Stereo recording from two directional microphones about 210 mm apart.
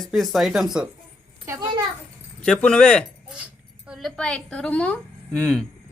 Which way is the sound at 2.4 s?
5° left (ahead or behind).